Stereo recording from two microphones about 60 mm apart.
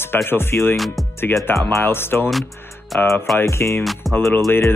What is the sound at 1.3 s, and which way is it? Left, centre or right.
Speech, left.